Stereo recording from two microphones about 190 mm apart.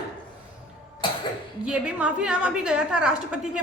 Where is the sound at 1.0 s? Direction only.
25° left (ahead or behind).